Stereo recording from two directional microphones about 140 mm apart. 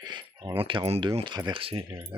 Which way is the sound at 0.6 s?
40° right (ahead or behind).